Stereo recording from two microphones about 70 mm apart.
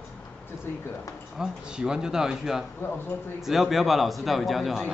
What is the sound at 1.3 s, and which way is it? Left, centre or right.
Speech, centre.